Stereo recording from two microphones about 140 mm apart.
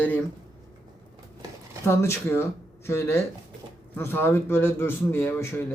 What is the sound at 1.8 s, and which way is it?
A man's voice, 20° left (ahead or behind).